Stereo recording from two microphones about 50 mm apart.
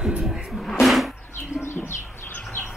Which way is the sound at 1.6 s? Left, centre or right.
Left.